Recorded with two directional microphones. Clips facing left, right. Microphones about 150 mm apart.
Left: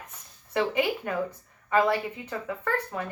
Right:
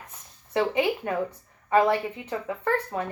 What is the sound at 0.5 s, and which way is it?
A woman's voice, 25° right (ahead or behind).